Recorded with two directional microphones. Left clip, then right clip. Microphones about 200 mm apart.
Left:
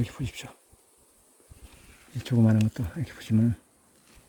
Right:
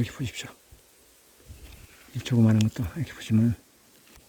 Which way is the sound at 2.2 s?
5° left (ahead or behind).